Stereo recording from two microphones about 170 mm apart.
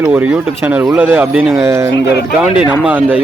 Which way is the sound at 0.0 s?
5° right (ahead or behind).